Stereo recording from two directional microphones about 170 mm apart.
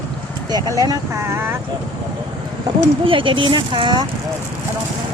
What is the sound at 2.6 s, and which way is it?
Speech, 30° right (ahead or behind).